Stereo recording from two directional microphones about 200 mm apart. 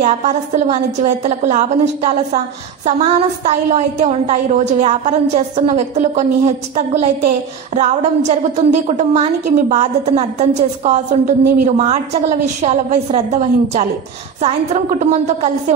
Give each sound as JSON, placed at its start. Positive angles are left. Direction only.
{"t": 0.0, "sound": "a woman's voice", "side_deg": -35}